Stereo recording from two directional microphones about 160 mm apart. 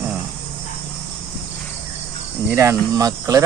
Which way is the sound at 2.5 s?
15° right (ahead or behind).